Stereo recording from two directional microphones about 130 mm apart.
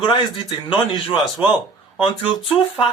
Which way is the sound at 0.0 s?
40° left (ahead or behind).